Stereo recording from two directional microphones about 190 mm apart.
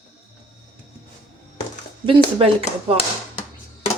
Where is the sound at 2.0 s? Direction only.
25° right (ahead or behind).